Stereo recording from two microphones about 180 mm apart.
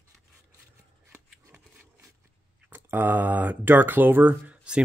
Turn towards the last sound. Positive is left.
turn(degrees=-5)  # may be behind; listen again after turning